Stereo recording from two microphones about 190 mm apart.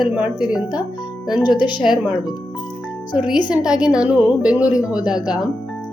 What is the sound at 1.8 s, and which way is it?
Speech, centre (ahead or behind).